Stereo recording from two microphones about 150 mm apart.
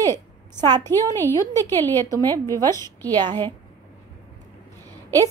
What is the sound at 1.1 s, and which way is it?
Speech, 15° left (ahead or behind).